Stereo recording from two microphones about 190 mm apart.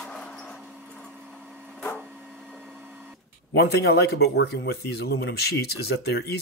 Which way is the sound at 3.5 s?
60° left (ahead or behind).